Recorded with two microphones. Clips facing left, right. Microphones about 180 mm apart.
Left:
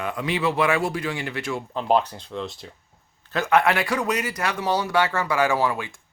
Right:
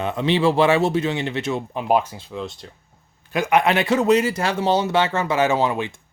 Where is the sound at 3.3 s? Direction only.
15° right (ahead or behind).